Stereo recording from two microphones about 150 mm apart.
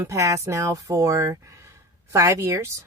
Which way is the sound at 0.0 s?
20° right (ahead or behind).